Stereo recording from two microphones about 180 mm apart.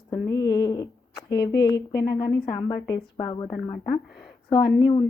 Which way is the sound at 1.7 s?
20° left (ahead or behind).